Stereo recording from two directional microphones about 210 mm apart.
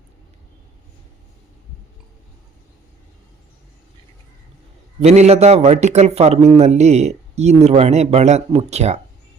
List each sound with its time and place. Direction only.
4.9 s a man's voice: 30° right (ahead or behind)